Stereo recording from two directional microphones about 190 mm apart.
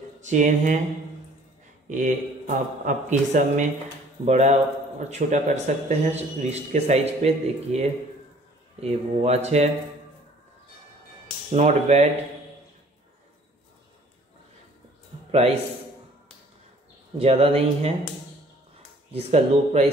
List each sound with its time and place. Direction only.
0.2 s a man's voice: 40° right (ahead or behind)
1.9 s a man's voice: 40° right (ahead or behind)
11.5 s a man's voice: 35° right (ahead or behind)
17.2 s a man's voice: 30° right (ahead or behind)
19.1 s a man's voice: 30° right (ahead or behind)